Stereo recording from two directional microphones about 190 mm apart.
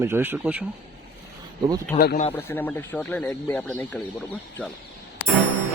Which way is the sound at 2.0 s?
55° left (ahead or behind).